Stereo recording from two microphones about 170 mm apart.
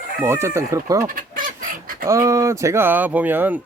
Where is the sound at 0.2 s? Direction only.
15° right (ahead or behind).